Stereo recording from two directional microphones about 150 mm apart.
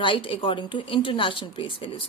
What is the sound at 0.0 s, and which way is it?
A woman's voice, 35° left (ahead or behind).